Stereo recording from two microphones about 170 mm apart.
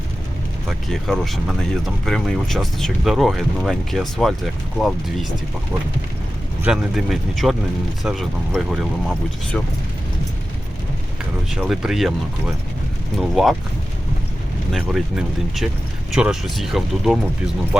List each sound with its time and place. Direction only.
0.7 s speech: centre (ahead or behind)
6.6 s speech: 5° right (ahead or behind)
11.5 s speech: 5° right (ahead or behind)
13.1 s speech: centre (ahead or behind)
14.7 s speech: centre (ahead or behind)